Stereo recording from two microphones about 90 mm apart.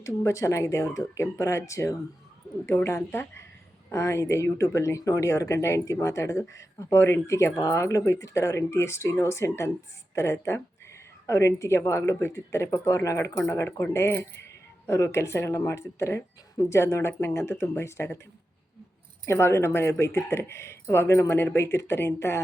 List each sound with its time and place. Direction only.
0.0 s speech: 35° left (ahead or behind)
19.2 s speech: 30° left (ahead or behind)